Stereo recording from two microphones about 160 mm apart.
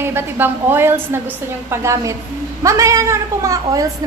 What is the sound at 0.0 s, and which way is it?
A woman's voice, 15° right (ahead or behind).